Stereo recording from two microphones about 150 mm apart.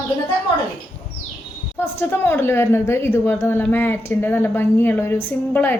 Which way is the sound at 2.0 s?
15° left (ahead or behind).